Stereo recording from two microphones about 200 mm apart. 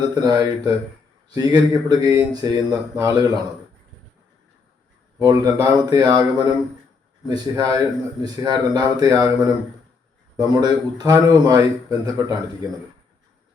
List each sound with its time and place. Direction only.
0.1 s speech: 20° right (ahead or behind)
5.2 s speech: 20° right (ahead or behind)